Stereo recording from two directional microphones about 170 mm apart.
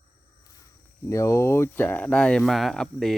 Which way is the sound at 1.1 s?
15° left (ahead or behind).